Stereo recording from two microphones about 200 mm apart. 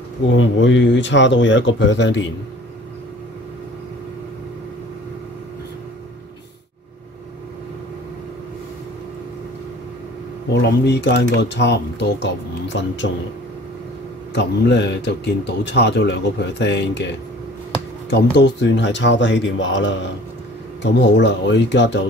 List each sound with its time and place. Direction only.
0.4 s speech: 70° left (ahead or behind)
10.6 s speech: 55° left (ahead or behind)
14.3 s speech: 60° left (ahead or behind)
18.1 s speech: 60° left (ahead or behind)